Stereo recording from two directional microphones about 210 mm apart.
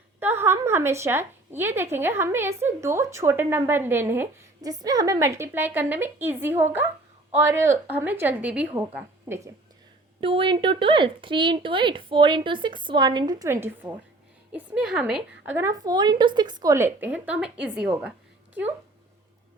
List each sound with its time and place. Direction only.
0.2 s a woman's voice: 10° right (ahead or behind)
10.2 s a woman's voice: 25° right (ahead or behind); by 18.1 s 5° right (ahead or behind)